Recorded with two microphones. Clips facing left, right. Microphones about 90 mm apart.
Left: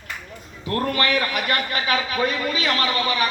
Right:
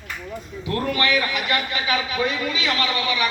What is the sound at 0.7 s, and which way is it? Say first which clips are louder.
A man's voice: even; 45° left (ahead or behind).